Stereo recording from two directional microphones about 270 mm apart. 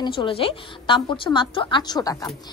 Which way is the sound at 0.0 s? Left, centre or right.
Centre.